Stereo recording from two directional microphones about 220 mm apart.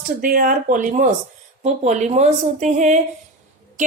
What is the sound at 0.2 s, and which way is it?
Speech, 40° right (ahead or behind).